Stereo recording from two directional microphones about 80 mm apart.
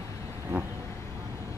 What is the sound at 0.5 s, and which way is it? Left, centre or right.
Vehicle, centre.